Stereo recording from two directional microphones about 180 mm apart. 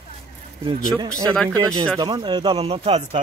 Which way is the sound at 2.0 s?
25° right (ahead or behind).